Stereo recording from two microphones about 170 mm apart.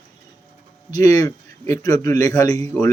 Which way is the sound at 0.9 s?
20° left (ahead or behind).